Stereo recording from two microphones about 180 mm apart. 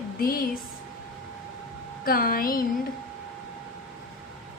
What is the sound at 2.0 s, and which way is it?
Speech, 55° left (ahead or behind).